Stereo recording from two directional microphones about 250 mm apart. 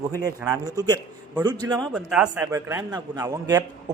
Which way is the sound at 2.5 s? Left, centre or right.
Centre.